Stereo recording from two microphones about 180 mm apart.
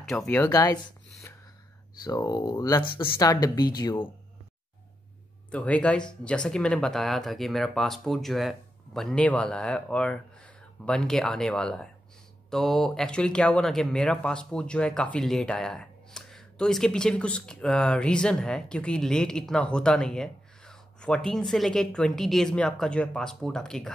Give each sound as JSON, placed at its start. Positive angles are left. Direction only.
{"t": 0.0, "sound": "speech", "side_deg": 0}
{"t": 0.5, "sound": "speech", "side_deg": 20}
{"t": 2.0, "sound": "speech", "side_deg": 20}
{"t": 5.5, "sound": "speech", "side_deg": 5}